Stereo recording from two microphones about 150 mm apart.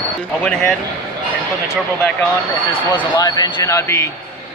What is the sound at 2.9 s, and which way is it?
Speech, 25° left (ahead or behind).